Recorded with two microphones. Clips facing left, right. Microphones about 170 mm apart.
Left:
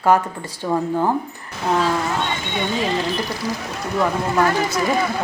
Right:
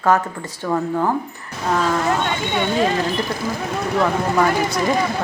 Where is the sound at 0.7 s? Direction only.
15° left (ahead or behind).